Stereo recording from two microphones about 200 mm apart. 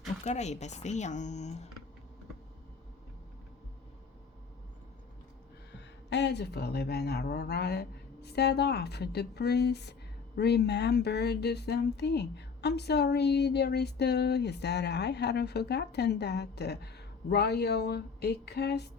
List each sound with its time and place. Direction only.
0.3 s speech: 35° left (ahead or behind)
6.1 s speech: 60° left (ahead or behind)